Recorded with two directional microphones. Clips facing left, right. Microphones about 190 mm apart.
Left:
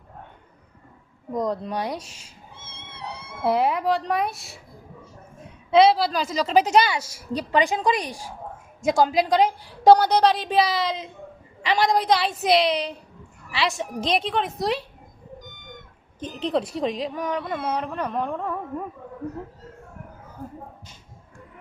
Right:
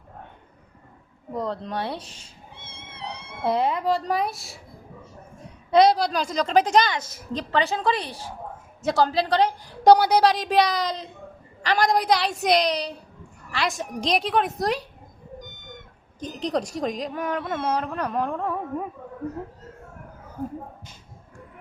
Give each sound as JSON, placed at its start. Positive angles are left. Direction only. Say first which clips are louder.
{"t": 1.4, "sound": "a woman's voice", "louder": "left 2 dB", "side_deg": 10}
{"t": 2.0, "sound": "a woman's voice", "louder": "left 1 dB", "side_deg": -35}
{"t": 3.4, "sound": "music", "louder": "left 1 dB", "side_deg": 5}
{"t": 5.7, "sound": "a woman's voice", "louder": "left 1 dB", "side_deg": 0}
{"t": 9.8, "sound": "speech", "louder": "left 1 dB", "side_deg": 0}
{"t": 10.1, "sound": "music", "louder": "even", "side_deg": -5}
{"t": 12.6, "sound": "a woman's voice", "louder": "left 2 dB", "side_deg": -40}
{"t": 13.6, "sound": "music", "louder": "left 1 dB", "side_deg": 0}
{"t": 16.2, "sound": "a woman's voice", "louder": "left 1 dB", "side_deg": -40}
{"t": 17.2, "sound": "music", "louder": "even", "side_deg": 0}